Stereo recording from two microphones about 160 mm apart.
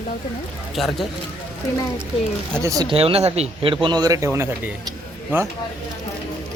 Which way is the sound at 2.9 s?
35° right (ahead or behind).